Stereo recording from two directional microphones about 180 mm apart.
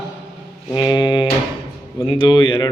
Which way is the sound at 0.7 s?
25° left (ahead or behind).